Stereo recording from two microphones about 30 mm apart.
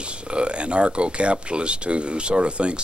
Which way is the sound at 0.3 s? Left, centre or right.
Right.